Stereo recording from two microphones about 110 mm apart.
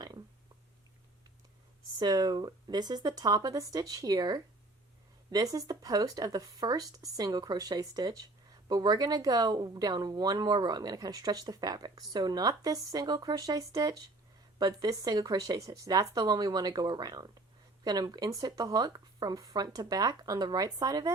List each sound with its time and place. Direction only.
2.0 s speech: 35° right (ahead or behind)